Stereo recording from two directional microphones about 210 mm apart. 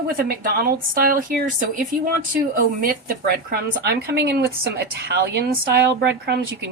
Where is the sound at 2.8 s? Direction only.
45° right (ahead or behind).